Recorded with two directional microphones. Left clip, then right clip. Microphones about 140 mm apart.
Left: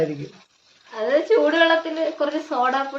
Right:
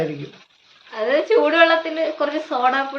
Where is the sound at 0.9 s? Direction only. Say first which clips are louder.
Right 1 dB; 15° left (ahead or behind).